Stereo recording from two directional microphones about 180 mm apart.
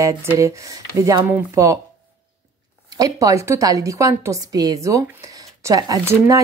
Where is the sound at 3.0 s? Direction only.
20° right (ahead or behind).